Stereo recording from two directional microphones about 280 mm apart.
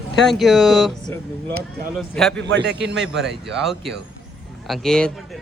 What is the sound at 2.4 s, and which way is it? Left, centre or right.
Speech, right.